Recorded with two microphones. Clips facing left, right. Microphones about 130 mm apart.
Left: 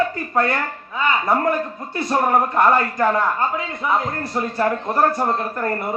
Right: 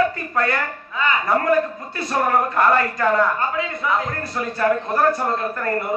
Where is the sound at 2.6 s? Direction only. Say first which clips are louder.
Left 1 dB; 25° left (ahead or behind).